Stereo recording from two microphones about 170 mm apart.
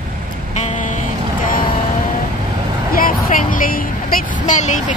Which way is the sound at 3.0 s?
55° left (ahead or behind).